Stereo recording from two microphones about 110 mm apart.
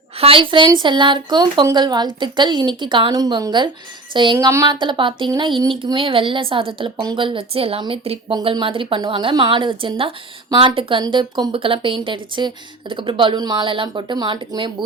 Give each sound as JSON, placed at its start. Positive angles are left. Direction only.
{"t": 0.2, "sound": "speech", "side_deg": -55}
{"t": 3.1, "sound": "a woman's voice", "side_deg": -35}
{"t": 4.4, "sound": "speech", "side_deg": -30}
{"t": 10.5, "sound": "a woman's voice", "side_deg": -40}
{"t": 10.8, "sound": "speech", "side_deg": -50}